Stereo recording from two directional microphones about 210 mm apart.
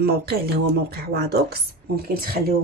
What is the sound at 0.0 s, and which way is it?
Speech, 50° right (ahead or behind).